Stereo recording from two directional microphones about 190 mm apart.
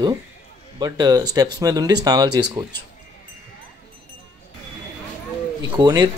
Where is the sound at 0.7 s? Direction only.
20° right (ahead or behind).